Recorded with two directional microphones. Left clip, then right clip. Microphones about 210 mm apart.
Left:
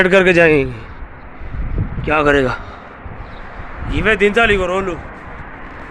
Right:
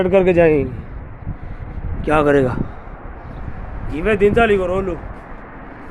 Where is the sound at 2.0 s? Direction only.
15° right (ahead or behind).